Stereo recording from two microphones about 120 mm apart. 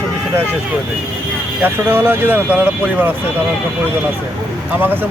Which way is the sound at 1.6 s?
20° right (ahead or behind).